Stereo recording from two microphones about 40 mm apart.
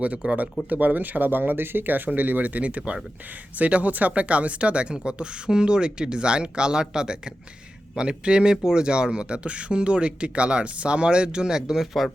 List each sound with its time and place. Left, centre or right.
0.0 s speech: right
0.7 s speech: right; by 11.8 s centre